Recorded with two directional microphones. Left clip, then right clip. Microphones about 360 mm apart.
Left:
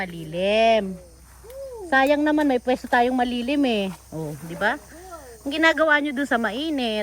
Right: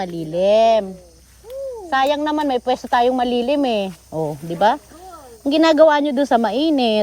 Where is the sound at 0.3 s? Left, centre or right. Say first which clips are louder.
Right 5 dB; centre.